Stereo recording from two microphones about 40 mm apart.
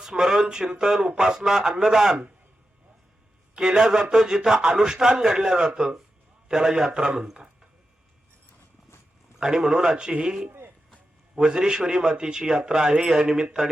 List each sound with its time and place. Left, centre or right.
0.0 s a man's voice: centre
3.5 s a man's voice: centre
9.4 s a man's voice: centre